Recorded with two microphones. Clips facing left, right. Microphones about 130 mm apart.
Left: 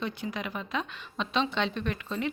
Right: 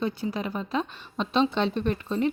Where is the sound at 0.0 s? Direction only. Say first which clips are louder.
Right 5 dB; 35° right (ahead or behind).